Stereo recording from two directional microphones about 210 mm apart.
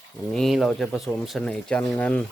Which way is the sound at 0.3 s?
Centre (ahead or behind).